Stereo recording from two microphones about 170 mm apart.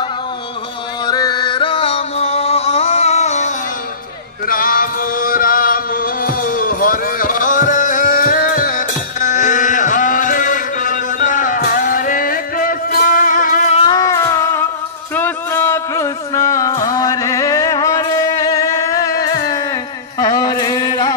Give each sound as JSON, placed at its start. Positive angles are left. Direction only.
{"t": 1.0, "sound": "music", "side_deg": 25}
{"t": 4.5, "sound": "music", "side_deg": 55}
{"t": 13.8, "sound": "music", "side_deg": 20}